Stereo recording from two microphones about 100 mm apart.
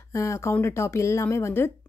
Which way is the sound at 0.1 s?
30° left (ahead or behind).